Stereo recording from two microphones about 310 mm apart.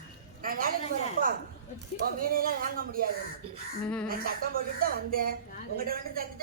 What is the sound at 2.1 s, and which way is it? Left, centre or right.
Speech, right.